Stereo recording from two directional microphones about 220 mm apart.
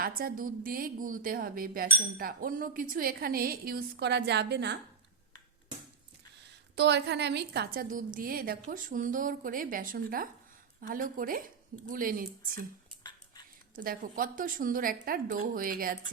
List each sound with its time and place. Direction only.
0.2 s speech: 40° right (ahead or behind)
6.7 s speech: 50° right (ahead or behind)
13.0 s a sound: 20° left (ahead or behind)
13.7 s speech: 40° right (ahead or behind)